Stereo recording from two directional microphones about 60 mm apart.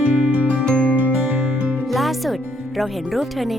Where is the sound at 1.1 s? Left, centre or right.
Centre.